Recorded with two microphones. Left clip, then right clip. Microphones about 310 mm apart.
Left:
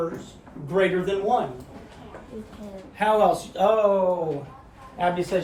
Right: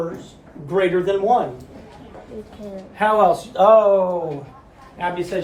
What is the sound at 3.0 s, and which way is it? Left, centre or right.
Speech, right.